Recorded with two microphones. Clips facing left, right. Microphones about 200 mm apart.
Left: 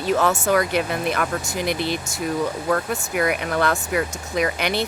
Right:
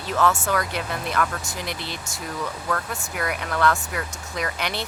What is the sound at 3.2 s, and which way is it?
Speech, 15° left (ahead or behind).